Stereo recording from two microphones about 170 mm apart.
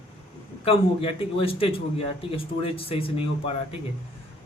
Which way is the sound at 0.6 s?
35° left (ahead or behind).